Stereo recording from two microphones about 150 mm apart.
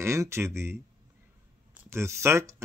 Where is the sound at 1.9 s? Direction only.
20° right (ahead or behind).